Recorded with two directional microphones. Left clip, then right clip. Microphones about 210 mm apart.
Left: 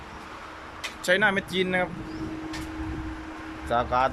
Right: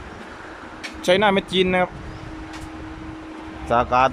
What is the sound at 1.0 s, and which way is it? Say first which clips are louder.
Speech: right 5 dB; 15° right (ahead or behind).